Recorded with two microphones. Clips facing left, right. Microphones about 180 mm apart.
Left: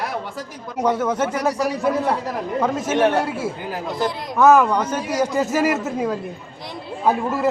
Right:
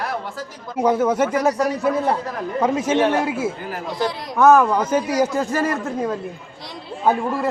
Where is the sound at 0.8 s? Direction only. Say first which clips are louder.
Right 3 dB; 10° right (ahead or behind).